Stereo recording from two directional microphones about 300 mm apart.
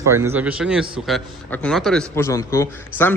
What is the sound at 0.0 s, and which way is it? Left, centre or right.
A man's voice, centre.